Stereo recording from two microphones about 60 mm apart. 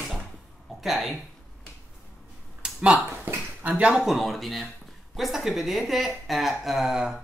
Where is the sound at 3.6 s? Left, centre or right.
Right.